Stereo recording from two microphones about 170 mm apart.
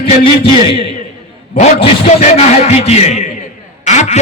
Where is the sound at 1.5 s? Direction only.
35° left (ahead or behind).